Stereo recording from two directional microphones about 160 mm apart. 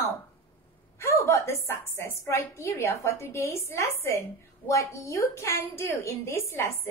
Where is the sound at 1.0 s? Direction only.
15° left (ahead or behind).